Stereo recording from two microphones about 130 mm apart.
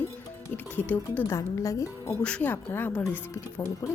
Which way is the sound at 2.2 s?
10° left (ahead or behind).